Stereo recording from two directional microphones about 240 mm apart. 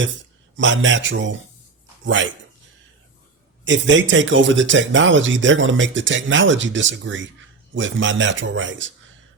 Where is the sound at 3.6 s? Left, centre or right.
Right.